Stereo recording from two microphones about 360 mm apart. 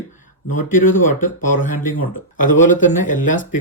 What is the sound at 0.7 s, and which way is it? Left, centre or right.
Speech, left.